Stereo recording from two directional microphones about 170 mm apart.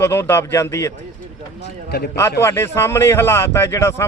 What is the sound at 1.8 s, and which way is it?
Speech, 65° left (ahead or behind).